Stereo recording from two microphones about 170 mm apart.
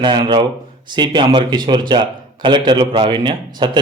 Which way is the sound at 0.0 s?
25° right (ahead or behind).